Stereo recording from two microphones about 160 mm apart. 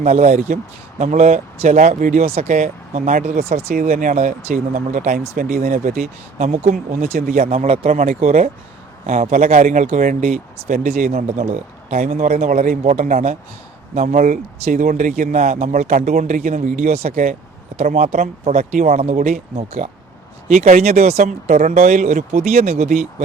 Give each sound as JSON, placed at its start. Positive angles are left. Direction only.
{"t": 0.0, "sound": "speech", "side_deg": -45}